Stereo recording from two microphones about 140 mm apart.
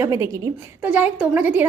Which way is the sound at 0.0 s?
20° right (ahead or behind).